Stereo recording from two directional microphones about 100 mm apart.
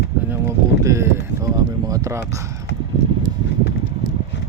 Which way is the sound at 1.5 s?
35° right (ahead or behind).